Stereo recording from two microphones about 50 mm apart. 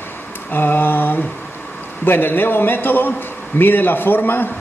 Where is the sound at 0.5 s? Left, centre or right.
Left.